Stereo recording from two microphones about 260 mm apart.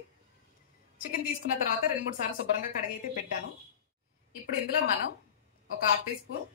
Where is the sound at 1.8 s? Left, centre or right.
Left.